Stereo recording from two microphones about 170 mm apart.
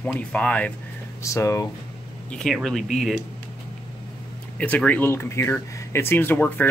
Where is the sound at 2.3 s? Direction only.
Centre (ahead or behind).